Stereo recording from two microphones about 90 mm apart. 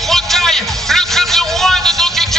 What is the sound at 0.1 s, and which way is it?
Music, 5° left (ahead or behind).